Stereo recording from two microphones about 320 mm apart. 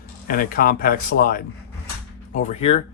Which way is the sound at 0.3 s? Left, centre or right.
Left.